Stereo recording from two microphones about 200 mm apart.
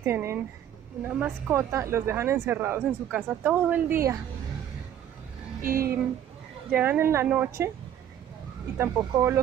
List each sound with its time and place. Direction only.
0.0 s a woman's voice: 10° right (ahead or behind)
5.6 s speech: 45° right (ahead or behind)
6.7 s a woman's voice: 10° right (ahead or behind)
8.7 s a woman's voice: 15° right (ahead or behind)